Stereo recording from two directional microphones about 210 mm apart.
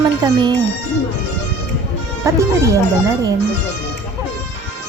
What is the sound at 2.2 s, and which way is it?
Speech, 15° right (ahead or behind).